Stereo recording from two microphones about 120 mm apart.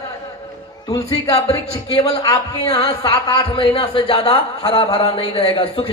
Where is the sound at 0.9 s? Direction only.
30° left (ahead or behind).